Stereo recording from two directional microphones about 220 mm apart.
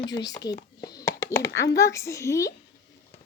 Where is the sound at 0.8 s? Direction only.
15° left (ahead or behind).